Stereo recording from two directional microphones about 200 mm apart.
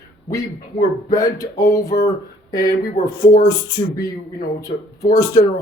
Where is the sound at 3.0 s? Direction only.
35° left (ahead or behind).